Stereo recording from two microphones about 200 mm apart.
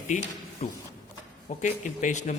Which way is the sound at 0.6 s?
35° left (ahead or behind).